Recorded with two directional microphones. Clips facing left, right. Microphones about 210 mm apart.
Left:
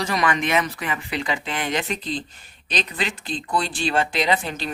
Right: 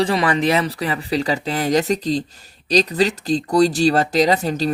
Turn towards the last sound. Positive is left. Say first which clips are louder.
# right 6 dB
turn(degrees=-40)  # may be behind; listen again after turning